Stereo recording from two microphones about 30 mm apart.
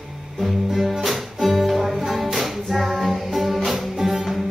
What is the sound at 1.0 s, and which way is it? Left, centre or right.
Music, centre.